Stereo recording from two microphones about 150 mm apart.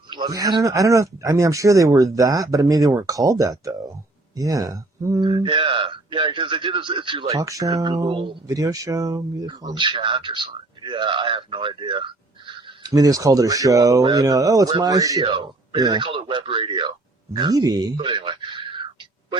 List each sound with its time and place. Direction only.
0.1 s speech: 25° right (ahead or behind)
7.3 s speech: 20° right (ahead or behind)
8.4 s speech: 20° right (ahead or behind)
15.2 s speech: 35° right (ahead or behind)